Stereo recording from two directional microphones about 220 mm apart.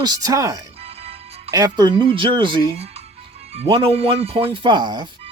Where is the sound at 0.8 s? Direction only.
25° right (ahead or behind).